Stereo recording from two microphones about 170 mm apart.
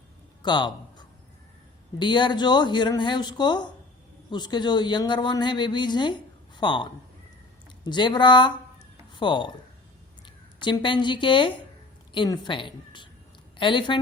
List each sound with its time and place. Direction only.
0.4 s a man's voice: 25° left (ahead or behind)